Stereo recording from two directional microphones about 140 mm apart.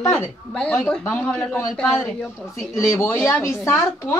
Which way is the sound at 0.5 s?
5° left (ahead or behind).